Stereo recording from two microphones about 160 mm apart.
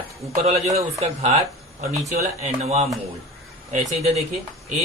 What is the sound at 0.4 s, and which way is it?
A man's voice, 45° right (ahead or behind).